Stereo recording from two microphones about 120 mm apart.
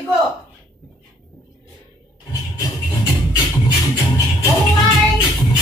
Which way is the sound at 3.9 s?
25° left (ahead or behind).